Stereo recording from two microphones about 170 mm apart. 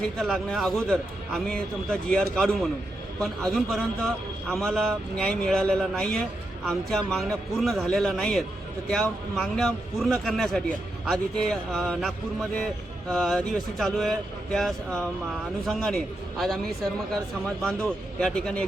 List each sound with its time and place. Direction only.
0.2 s a man's voice: centre (ahead or behind)